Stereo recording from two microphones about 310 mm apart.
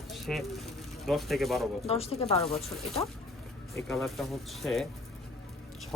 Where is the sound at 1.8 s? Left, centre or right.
Centre.